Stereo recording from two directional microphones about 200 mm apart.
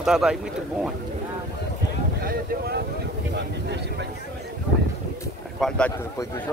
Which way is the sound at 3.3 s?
60° right (ahead or behind).